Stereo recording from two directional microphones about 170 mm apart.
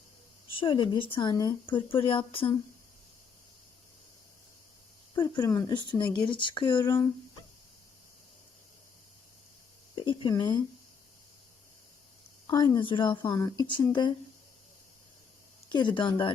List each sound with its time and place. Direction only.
0.5 s speech: 30° left (ahead or behind)
5.3 s speech: 20° left (ahead or behind)
9.9 s a sound: 30° left (ahead or behind)
12.5 s speech: 25° left (ahead or behind)
15.7 s speech: 25° left (ahead or behind)